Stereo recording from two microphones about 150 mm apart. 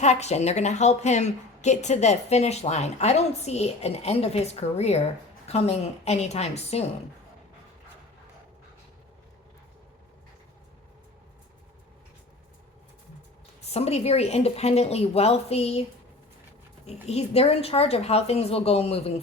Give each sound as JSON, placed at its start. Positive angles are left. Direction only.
{"t": 0.0, "sound": "a woman's voice", "side_deg": 50}
{"t": 13.7, "sound": "a woman's voice", "side_deg": 45}
{"t": 16.8, "sound": "a woman's voice", "side_deg": 45}